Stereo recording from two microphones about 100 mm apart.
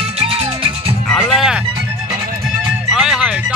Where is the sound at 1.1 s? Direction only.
Centre (ahead or behind).